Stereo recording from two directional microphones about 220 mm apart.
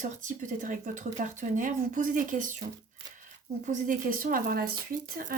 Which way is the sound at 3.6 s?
35° right (ahead or behind).